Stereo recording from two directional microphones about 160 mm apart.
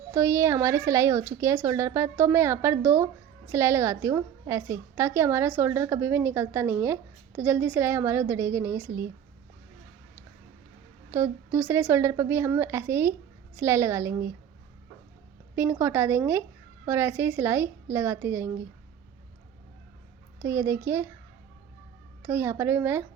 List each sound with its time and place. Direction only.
0.1 s a woman's voice: 20° right (ahead or behind)
11.1 s a woman's voice: 15° right (ahead or behind)
15.5 s a woman's voice: 15° right (ahead or behind)
20.4 s a woman's voice: 15° right (ahead or behind)
22.2 s a woman's voice: 15° right (ahead or behind)